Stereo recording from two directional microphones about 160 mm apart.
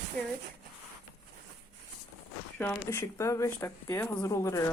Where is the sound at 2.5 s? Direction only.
10° left (ahead or behind).